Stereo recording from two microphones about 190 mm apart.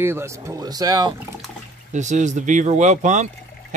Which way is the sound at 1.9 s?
40° right (ahead or behind).